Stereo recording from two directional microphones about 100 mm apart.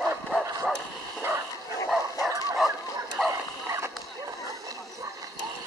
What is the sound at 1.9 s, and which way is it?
Bow-wow, centre (ahead or behind).